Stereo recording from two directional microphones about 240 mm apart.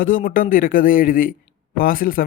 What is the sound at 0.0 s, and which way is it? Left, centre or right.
A man's voice, left.